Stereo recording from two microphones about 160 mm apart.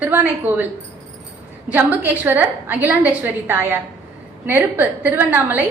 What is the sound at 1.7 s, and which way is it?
A woman's voice, 10° right (ahead or behind).